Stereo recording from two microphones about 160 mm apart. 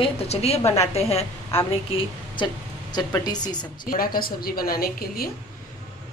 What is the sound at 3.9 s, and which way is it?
A woman's voice, 65° left (ahead or behind).